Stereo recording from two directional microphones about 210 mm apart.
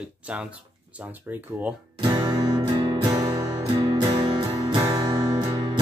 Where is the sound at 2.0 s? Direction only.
20° right (ahead or behind).